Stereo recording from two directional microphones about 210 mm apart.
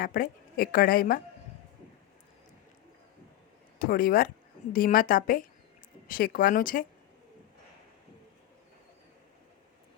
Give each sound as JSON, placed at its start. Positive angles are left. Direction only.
{"t": 0.0, "sound": "a woman's voice", "side_deg": 45}
{"t": 3.8, "sound": "a woman's voice", "side_deg": 45}